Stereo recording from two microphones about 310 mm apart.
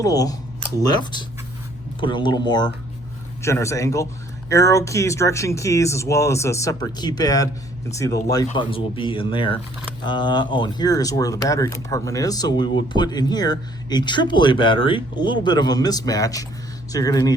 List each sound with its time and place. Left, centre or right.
0.0 s speech: centre